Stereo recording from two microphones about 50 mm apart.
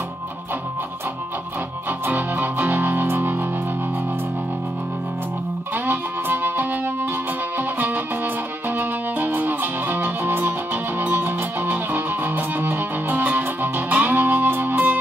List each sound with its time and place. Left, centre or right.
1.9 s music: right
5.9 s music: right